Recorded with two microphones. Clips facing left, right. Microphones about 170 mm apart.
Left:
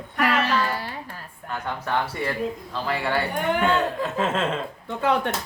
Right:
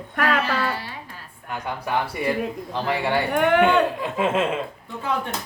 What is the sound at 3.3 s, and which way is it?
Speech, 65° right (ahead or behind).